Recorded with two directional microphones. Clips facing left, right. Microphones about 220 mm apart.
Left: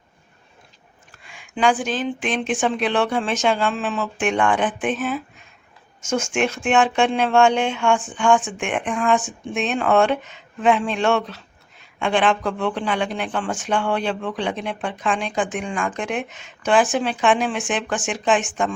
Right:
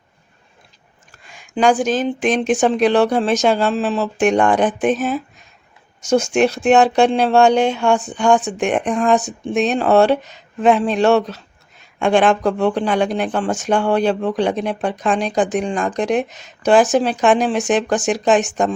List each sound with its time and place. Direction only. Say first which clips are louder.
1.1 s speech: right 7 dB; 40° right (ahead or behind)